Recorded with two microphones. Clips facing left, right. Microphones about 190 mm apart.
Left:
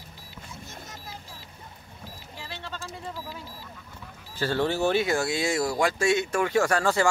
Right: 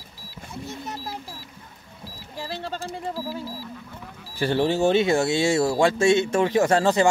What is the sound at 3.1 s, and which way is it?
Speech, 30° right (ahead or behind).